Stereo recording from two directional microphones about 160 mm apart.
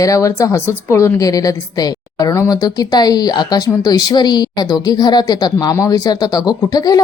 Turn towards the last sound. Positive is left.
turn(degrees=25)  # may be behind; listen again after turning